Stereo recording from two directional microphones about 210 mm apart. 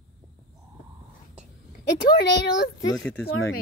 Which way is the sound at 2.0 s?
50° left (ahead or behind).